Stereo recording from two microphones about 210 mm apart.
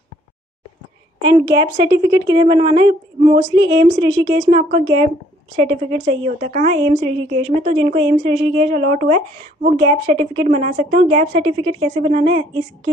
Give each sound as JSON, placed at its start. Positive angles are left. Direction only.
{"t": 1.2, "sound": "a woman's voice", "side_deg": -20}
{"t": 9.8, "sound": "a woman's voice", "side_deg": -20}
{"t": 10.4, "sound": "a woman's voice", "side_deg": -30}